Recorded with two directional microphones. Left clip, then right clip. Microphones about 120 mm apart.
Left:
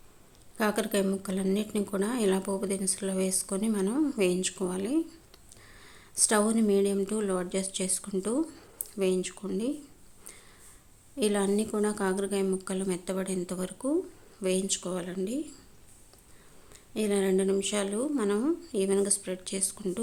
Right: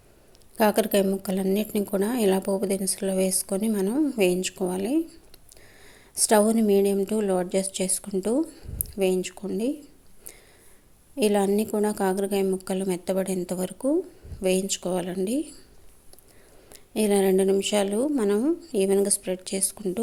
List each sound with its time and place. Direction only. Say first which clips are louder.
0.5 s a woman's voice: right 7 dB; 40° right (ahead or behind)
3.8 s a woman's voice: right 3 dB; 25° right (ahead or behind)
4.2 s a woman's voice: right 5 dB; 35° right (ahead or behind)
8.4 s a woman's voice: right 4 dB; 20° right (ahead or behind)
8.8 s speech: right 4 dB; 35° right (ahead or behind)
11.2 s a woman's voice: right 5 dB; 35° right (ahead or behind)
16.7 s a woman's voice: right 6 dB; 45° right (ahead or behind)
18.2 s a woman's voice: right 5 dB; 30° right (ahead or behind)
18.7 s a woman's voice: right 6 dB; 40° right (ahead or behind)